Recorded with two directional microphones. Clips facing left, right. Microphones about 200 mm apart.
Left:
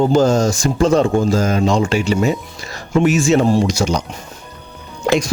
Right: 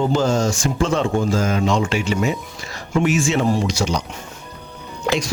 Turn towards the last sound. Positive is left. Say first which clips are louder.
# left 5 dB
turn(degrees=50)  # may be behind; listen again after turning